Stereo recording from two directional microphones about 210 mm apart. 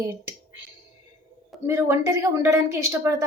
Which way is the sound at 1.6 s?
10° right (ahead or behind).